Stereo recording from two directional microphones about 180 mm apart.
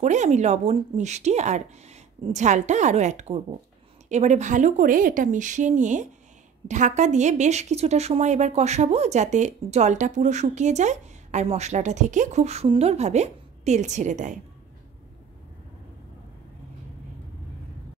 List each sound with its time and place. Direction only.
0.0 s a woman's voice: 40° right (ahead or behind)